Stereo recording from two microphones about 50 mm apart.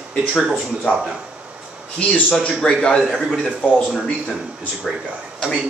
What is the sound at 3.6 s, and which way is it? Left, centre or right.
Speech, left.